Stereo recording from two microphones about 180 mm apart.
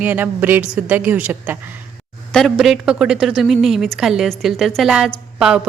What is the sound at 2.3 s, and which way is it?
A woman's voice, 5° left (ahead or behind).